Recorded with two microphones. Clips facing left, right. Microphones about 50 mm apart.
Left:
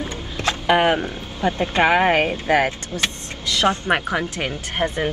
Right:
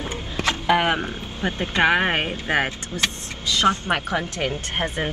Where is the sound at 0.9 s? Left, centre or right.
Right.